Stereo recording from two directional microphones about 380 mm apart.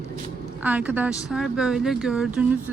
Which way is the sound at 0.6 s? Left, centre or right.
Centre.